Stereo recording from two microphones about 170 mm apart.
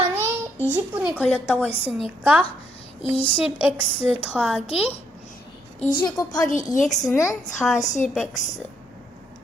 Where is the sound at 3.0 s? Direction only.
35° left (ahead or behind).